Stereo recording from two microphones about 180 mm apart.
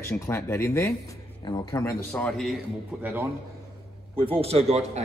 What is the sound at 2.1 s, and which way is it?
Speech, 5° left (ahead or behind).